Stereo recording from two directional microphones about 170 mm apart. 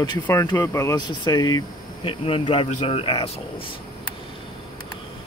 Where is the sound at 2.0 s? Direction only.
30° left (ahead or behind).